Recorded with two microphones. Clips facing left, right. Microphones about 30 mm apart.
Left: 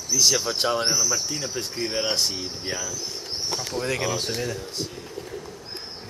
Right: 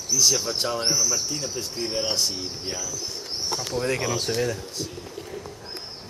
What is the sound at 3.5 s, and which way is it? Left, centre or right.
Speech, centre.